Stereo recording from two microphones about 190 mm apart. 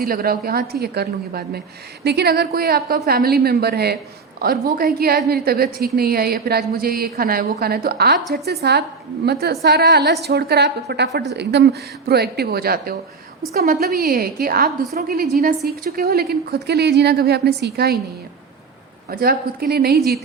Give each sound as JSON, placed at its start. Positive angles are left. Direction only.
{"t": 0.0, "sound": "a woman's voice", "side_deg": -50}
{"t": 19.1, "sound": "a woman's voice", "side_deg": -55}